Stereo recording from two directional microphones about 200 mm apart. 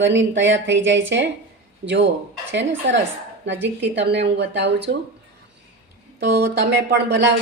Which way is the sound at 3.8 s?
60° right (ahead or behind).